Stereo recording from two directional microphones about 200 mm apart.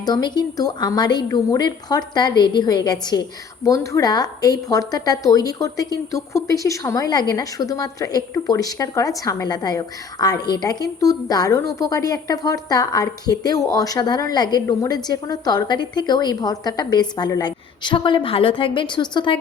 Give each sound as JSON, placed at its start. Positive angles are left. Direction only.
{"t": 0.0, "sound": "a woman's voice", "side_deg": 20}